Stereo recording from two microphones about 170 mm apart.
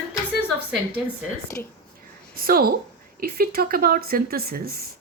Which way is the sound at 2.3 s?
60° right (ahead or behind).